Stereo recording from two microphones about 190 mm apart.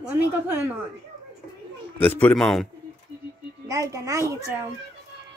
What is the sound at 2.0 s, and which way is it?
Speech, 10° left (ahead or behind).